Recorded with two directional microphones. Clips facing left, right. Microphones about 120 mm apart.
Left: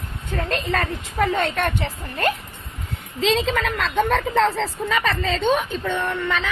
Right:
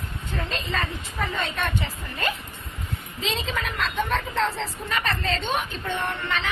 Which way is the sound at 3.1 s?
90° left.